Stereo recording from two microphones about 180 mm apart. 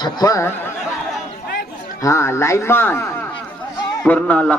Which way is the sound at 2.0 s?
15° left (ahead or behind).